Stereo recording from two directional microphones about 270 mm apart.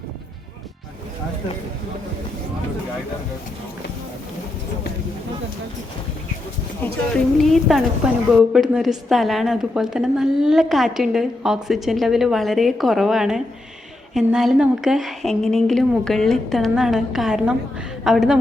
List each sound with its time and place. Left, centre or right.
7.5 s a woman's voice: centre